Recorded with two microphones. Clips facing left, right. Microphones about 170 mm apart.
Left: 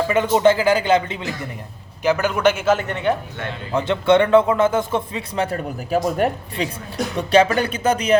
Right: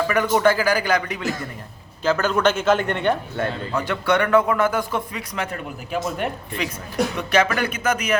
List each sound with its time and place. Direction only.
0.1 s a man's voice: 25° left (ahead or behind)
2.0 s a man's voice: 15° left (ahead or behind)
3.7 s a man's voice: 25° left (ahead or behind)